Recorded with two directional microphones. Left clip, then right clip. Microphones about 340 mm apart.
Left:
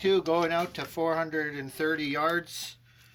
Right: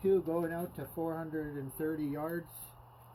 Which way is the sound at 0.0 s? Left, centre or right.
Centre.